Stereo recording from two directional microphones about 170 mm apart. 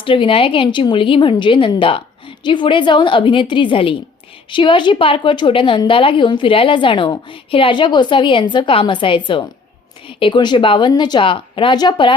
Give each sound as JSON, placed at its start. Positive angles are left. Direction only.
{"t": 0.0, "sound": "a woman's voice", "side_deg": 30}